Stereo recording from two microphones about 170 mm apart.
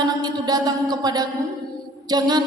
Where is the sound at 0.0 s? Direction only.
25° right (ahead or behind).